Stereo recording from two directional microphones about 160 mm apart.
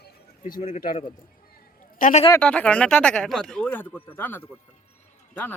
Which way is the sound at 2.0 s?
55° left (ahead or behind).